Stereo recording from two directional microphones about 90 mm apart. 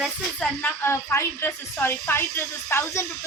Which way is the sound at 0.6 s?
25° left (ahead or behind).